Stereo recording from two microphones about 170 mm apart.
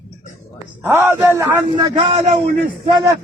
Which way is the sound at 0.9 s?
15° right (ahead or behind).